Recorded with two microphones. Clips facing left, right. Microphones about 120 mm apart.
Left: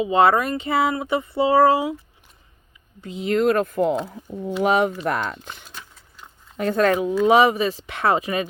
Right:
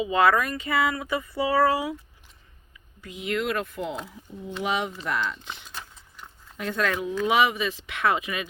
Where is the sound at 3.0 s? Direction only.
30° left (ahead or behind).